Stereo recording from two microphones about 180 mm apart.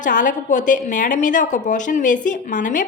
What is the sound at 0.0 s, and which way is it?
A woman's voice, 45° left (ahead or behind).